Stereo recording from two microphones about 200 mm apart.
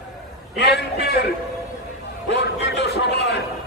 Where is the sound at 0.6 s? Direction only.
55° left (ahead or behind).